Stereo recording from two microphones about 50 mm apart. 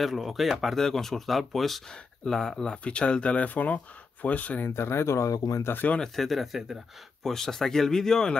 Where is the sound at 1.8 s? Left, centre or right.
Centre; by 4.6 s left.